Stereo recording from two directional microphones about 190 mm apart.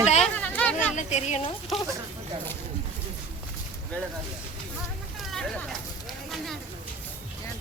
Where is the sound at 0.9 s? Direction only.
35° left (ahead or behind).